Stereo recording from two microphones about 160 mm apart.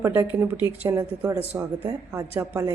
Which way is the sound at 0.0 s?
10° right (ahead or behind).